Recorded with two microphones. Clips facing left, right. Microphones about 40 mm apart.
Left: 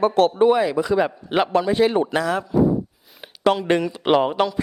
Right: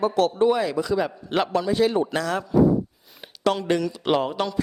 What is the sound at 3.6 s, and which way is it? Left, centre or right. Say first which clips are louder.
Speech: left 3 dB; left.